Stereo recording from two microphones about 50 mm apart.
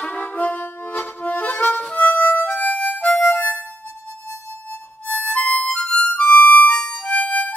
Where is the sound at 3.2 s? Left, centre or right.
Left.